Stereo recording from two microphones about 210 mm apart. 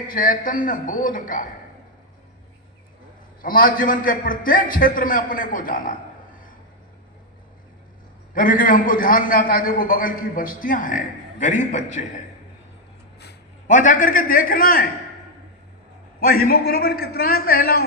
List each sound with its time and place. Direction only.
0.1 s a man's voice: 40° left (ahead or behind)
3.4 s a man's voice: 40° left (ahead or behind)
8.4 s a man's voice: 40° left (ahead or behind)
13.7 s a man's voice: 40° left (ahead or behind)
16.2 s a man's voice: 45° left (ahead or behind)